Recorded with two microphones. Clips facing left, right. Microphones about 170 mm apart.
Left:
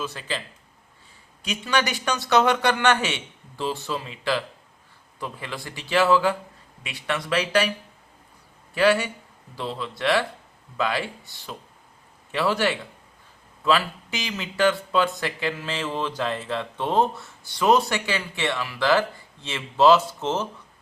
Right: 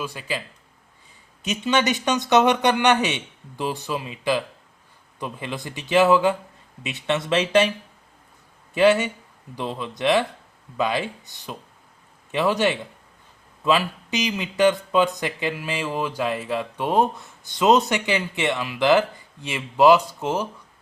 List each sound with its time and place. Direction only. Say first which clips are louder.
0.0 s speech: right 1 dB; 10° right (ahead or behind)
8.7 s speech: right 3 dB; 20° right (ahead or behind)